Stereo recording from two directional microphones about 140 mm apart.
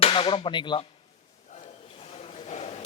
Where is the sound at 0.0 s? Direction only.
40° left (ahead or behind).